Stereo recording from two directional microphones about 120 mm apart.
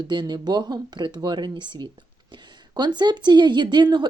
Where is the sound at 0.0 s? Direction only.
40° right (ahead or behind).